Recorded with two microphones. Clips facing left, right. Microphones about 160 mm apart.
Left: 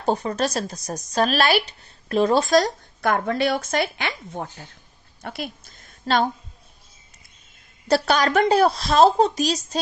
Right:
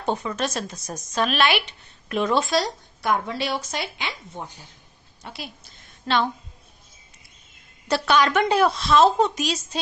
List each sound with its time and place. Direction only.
0.0 s a woman's voice: 35° left (ahead or behind)
7.9 s speech: 40° left (ahead or behind)